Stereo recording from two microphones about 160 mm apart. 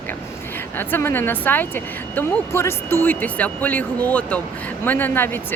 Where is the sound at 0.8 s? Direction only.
15° left (ahead or behind).